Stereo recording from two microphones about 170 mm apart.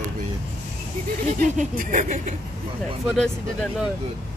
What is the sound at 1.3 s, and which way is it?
Speech, 50° right (ahead or behind).